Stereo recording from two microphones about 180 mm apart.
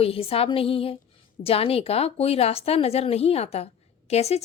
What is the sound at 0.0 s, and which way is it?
A woman's voice, 30° left (ahead or behind).